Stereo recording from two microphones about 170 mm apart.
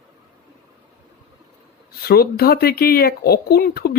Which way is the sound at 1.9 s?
65° left (ahead or behind).